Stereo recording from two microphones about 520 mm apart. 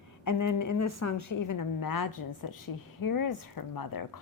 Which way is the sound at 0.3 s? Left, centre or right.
Left.